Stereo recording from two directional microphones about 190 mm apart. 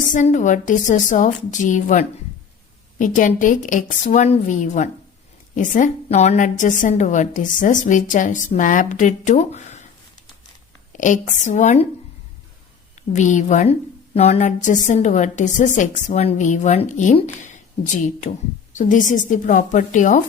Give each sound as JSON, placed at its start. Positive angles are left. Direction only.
{"t": 0.1, "sound": "a woman's voice", "side_deg": 40}
{"t": 10.9, "sound": "a woman's voice", "side_deg": 40}
{"t": 13.0, "sound": "a woman's voice", "side_deg": 40}